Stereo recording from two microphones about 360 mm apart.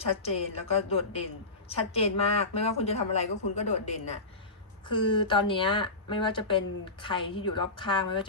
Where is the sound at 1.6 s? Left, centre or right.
Centre.